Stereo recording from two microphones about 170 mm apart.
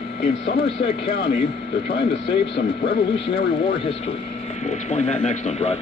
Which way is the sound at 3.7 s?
35° left (ahead or behind).